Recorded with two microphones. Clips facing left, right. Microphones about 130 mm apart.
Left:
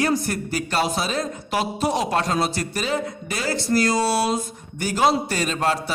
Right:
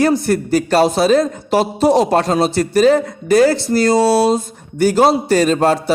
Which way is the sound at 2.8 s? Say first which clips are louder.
Right 14 dB; 40° right (ahead or behind).